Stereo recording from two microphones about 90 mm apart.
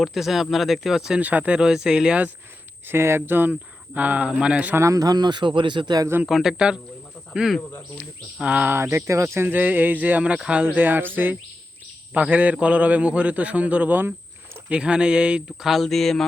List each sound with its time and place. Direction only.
0.0 s speech: 5° right (ahead or behind)
1.2 s a man's voice: 15° right (ahead or behind)
2.8 s a sound: 25° right (ahead or behind)
3.9 s a man's voice: 20° right (ahead or behind)
4.7 s speech: 35° right (ahead or behind); by 6.1 s 50° right (ahead or behind)
6.2 s speech: 5° right (ahead or behind)
8.4 s a sound: 15° right (ahead or behind)
12.1 s a man's voice: 15° right (ahead or behind); by 16.2 s 5° left (ahead or behind)